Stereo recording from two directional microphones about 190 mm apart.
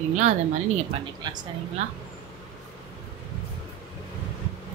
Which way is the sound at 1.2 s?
20° right (ahead or behind).